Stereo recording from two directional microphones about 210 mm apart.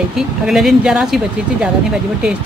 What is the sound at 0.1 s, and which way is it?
Speech, centre (ahead or behind).